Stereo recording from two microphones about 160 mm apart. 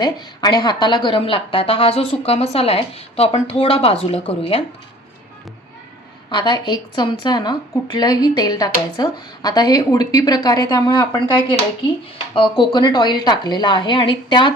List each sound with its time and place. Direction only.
0.0 s a woman's voice: 25° left (ahead or behind)
6.3 s a woman's voice: 30° left (ahead or behind)